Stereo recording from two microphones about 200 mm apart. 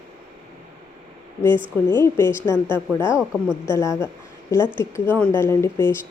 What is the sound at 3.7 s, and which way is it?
Speech, 15° left (ahead or behind).